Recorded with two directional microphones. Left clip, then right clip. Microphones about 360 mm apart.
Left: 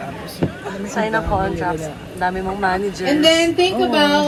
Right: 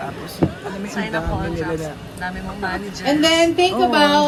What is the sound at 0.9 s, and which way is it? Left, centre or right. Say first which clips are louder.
Music: left 6 dB; centre.